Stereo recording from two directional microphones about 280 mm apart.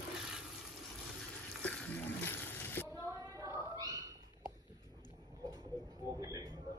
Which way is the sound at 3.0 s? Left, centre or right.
Centre.